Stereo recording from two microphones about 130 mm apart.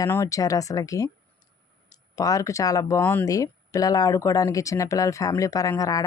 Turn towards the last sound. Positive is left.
turn(degrees=25)  # may be behind; listen again after turning